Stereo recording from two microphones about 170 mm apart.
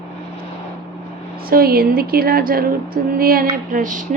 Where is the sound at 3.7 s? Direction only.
50° right (ahead or behind).